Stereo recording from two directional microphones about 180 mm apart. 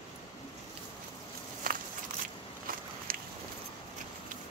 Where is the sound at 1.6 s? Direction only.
55° right (ahead or behind).